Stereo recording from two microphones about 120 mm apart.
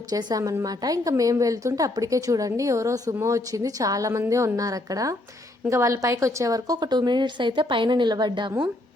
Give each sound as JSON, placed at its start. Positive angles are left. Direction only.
{"t": 0.1, "sound": "a woman's voice", "side_deg": -35}